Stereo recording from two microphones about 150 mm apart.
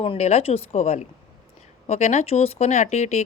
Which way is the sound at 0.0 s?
40° left (ahead or behind).